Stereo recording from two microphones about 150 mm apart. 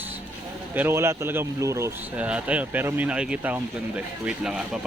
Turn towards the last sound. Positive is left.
turn(degrees=-5)  # may be behind; listen again after turning